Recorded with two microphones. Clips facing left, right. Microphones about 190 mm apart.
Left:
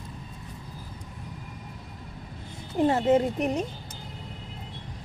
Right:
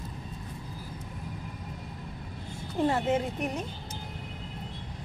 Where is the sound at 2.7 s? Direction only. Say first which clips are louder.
Left 4 dB; 20° left (ahead or behind).